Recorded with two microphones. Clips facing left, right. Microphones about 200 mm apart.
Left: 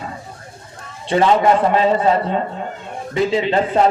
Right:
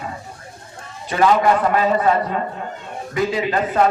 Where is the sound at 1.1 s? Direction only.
25° left (ahead or behind).